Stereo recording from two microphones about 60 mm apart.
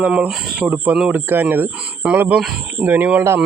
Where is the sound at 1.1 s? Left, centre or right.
Right.